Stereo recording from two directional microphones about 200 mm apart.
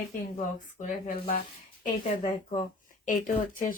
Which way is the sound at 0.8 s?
40° left (ahead or behind).